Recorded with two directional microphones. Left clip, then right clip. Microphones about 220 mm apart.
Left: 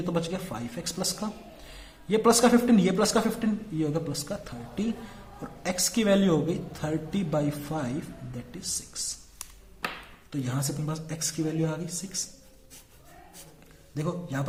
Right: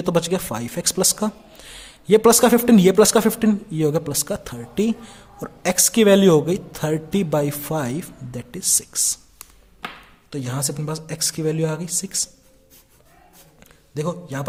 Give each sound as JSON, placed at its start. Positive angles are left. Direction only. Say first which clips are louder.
{"t": 0.0, "sound": "a man's voice", "louder": "right 10 dB", "side_deg": -50}
{"t": 10.2, "sound": "a man's voice", "louder": "right 6 dB", "side_deg": -50}
{"t": 13.9, "sound": "a man's voice", "louder": "right 6 dB", "side_deg": -50}